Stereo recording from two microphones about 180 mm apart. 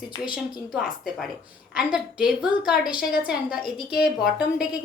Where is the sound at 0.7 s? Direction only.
Centre (ahead or behind).